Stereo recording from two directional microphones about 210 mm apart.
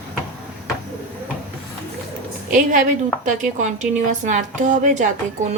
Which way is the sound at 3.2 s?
35° right (ahead or behind).